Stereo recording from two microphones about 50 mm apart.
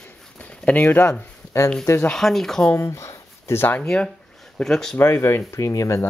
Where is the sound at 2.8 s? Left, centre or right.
Left.